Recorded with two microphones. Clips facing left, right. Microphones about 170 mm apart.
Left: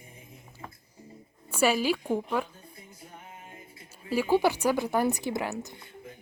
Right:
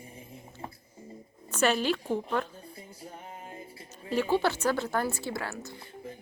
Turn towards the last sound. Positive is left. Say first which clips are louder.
# left 4 dB
turn(degrees=20)  # may be behind; listen again after turning